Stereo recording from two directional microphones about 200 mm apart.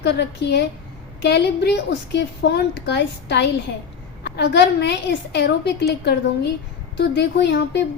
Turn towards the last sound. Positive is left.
turn(degrees=60)  # may be behind; listen again after turning